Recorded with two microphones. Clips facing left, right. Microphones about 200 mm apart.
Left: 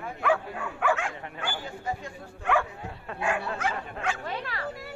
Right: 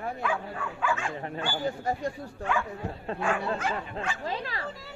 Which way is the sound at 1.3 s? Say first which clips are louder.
Right 5 dB; 40° right (ahead or behind).